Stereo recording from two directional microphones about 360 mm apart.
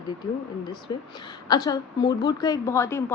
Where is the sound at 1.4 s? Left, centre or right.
Centre.